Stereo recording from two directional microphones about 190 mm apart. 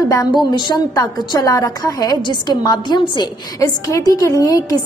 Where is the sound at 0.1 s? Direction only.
20° left (ahead or behind).